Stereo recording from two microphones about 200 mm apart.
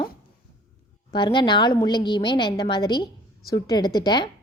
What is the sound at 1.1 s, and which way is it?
Speech, 25° left (ahead or behind).